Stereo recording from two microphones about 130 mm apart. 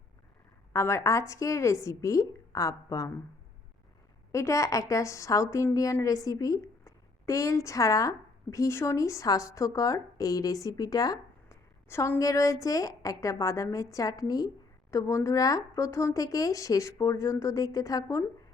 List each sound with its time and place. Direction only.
0.7 s a woman's voice: 20° left (ahead or behind)
4.3 s a woman's voice: 25° left (ahead or behind)
11.9 s a woman's voice: 20° left (ahead or behind)